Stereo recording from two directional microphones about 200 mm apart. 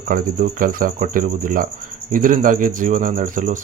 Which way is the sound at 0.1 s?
45° right (ahead or behind).